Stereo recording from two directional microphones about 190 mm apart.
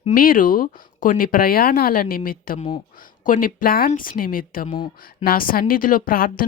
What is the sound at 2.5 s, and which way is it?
Speech, 30° left (ahead or behind).